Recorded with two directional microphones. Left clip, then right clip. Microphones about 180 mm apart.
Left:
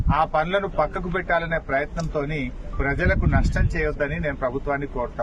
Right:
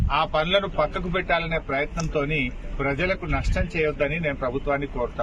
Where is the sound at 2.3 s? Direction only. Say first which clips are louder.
Right 3 dB; 5° left (ahead or behind).